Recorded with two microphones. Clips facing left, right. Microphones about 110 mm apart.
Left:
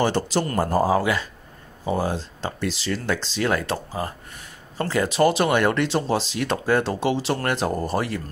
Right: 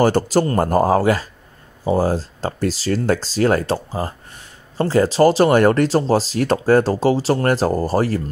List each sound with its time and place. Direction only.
0.0 s speech: 45° right (ahead or behind)